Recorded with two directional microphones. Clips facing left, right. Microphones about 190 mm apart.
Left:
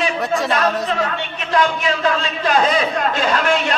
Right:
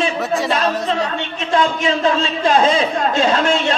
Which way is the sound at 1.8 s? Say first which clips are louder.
Right 2 dB; 25° right (ahead or behind).